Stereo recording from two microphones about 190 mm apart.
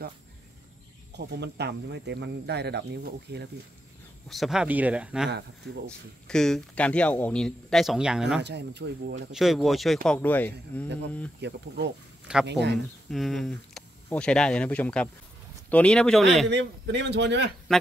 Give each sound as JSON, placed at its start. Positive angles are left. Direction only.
{"t": 1.1, "sound": "speech", "side_deg": -65}
{"t": 4.3, "sound": "speech", "side_deg": 0}
{"t": 8.4, "sound": "speech", "side_deg": -65}
{"t": 9.3, "sound": "speech", "side_deg": 0}
{"t": 11.4, "sound": "speech", "side_deg": -65}
{"t": 13.1, "sound": "speech", "side_deg": 0}
{"t": 16.4, "sound": "a man's voice", "side_deg": -65}
{"t": 17.7, "sound": "speech", "side_deg": 0}